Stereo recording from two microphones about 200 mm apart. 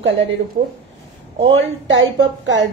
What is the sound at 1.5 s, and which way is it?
A woman's voice, 70° right (ahead or behind).